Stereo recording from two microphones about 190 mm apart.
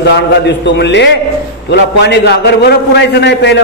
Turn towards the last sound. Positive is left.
turn(degrees=65)  # may be behind; listen again after turning